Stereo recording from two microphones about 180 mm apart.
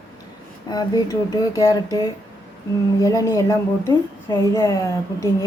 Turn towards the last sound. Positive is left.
turn(degrees=15)  # may be behind; listen again after turning